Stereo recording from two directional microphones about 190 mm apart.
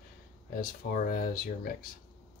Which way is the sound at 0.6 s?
50° left (ahead or behind).